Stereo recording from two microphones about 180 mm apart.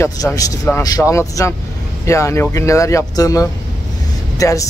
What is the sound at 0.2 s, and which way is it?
Speech, 10° left (ahead or behind).